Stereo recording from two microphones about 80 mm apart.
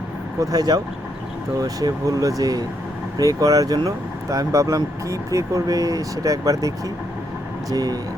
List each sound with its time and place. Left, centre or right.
0.3 s speech: right